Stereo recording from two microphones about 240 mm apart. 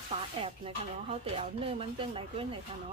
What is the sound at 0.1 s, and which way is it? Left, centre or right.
A woman's voice, right.